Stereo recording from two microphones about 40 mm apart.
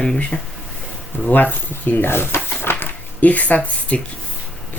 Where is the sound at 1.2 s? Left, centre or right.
Left.